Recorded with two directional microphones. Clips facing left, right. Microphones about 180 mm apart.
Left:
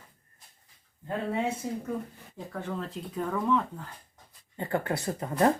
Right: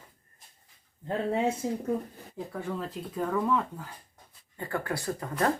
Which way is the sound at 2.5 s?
5° right (ahead or behind).